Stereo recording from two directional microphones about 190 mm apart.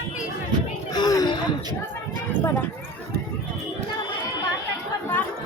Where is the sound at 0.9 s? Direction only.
20° left (ahead or behind).